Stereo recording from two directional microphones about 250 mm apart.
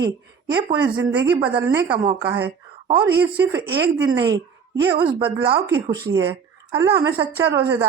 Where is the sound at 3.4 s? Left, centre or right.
Centre.